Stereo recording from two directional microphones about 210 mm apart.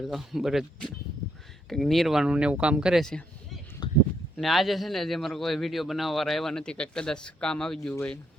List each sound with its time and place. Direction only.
0.0 s a man's voice: centre (ahead or behind)
3.8 s a sound: 20° left (ahead or behind)
4.4 s a man's voice: centre (ahead or behind)